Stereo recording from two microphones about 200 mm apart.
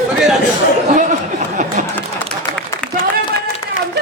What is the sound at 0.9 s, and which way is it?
Speech, 35° right (ahead or behind).